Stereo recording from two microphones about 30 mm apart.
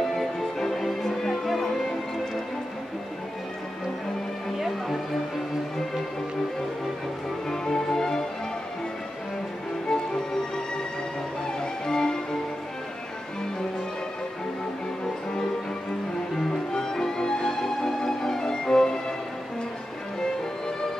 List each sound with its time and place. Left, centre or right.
0.0 s music: centre
4.6 s music: centre
7.4 s music: left
9.8 s music: left
11.8 s music: left
16.3 s music: centre